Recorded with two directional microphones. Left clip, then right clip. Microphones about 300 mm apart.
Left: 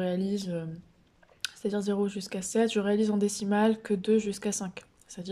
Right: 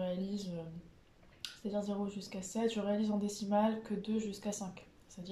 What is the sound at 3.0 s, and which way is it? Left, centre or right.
Speech, left.